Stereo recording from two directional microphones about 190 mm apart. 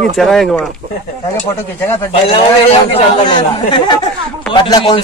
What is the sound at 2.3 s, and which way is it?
Speech, 30° left (ahead or behind).